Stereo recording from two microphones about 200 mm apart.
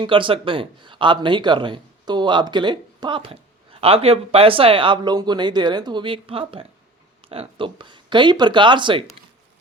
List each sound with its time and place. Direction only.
0.0 s speech: 25° right (ahead or behind)